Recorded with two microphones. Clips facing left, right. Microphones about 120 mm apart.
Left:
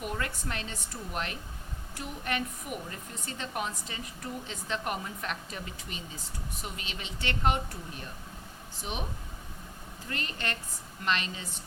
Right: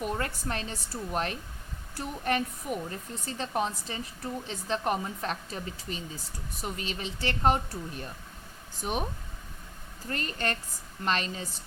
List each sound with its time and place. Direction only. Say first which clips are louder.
0.0 s a woman's voice: right 3 dB; 35° right (ahead or behind)
10.1 s a woman's voice: right 4 dB; 40° right (ahead or behind)